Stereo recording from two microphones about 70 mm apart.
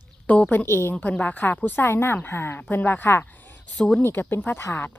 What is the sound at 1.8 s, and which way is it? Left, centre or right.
A woman's voice, left.